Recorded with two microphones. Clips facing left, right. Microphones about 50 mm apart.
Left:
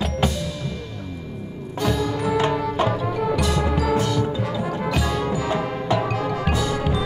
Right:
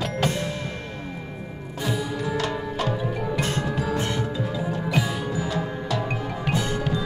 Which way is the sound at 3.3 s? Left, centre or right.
Right.